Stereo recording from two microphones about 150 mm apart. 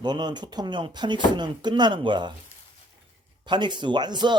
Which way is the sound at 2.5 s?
45° left (ahead or behind).